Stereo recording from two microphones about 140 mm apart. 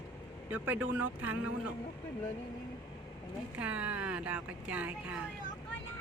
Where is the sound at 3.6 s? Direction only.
10° right (ahead or behind).